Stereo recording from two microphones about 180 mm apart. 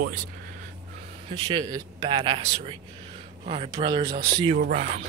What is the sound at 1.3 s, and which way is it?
Speech, 25° right (ahead or behind).